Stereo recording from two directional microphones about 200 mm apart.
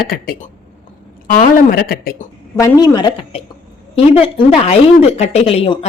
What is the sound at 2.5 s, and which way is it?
A woman's voice, 15° left (ahead or behind).